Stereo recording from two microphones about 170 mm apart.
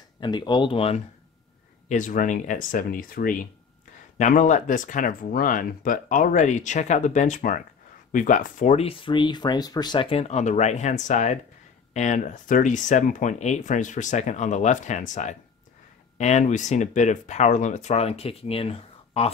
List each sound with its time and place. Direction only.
0.2 s speech: 25° left (ahead or behind)
1.9 s speech: 50° left (ahead or behind)